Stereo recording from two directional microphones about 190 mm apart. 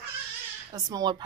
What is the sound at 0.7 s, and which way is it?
Speech, 20° right (ahead or behind).